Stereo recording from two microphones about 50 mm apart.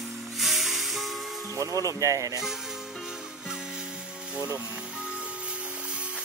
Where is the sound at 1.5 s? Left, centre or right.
Right.